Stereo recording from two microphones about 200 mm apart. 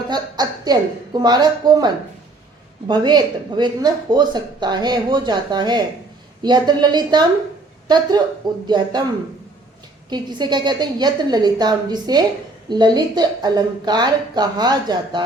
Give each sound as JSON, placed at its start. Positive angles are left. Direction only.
{"t": 0.1, "sound": "speech", "side_deg": -20}
{"t": 8.6, "sound": "speech", "side_deg": -20}
{"t": 10.1, "sound": "speech", "side_deg": -20}